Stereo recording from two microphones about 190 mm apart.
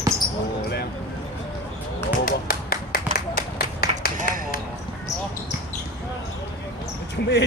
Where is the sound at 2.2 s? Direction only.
50° left (ahead or behind).